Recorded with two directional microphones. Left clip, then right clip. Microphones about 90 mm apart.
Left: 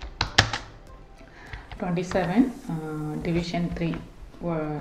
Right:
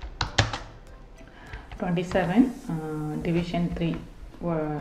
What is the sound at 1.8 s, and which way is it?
A woman's voice, 10° left (ahead or behind).